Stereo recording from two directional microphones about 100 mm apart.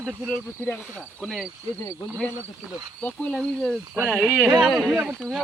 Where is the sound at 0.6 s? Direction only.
25° left (ahead or behind).